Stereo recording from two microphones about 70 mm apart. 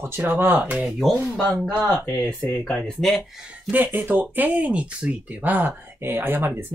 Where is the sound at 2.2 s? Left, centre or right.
Centre.